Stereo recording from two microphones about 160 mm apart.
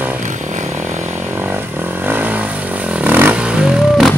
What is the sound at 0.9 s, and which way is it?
Vehicle, 45° right (ahead or behind).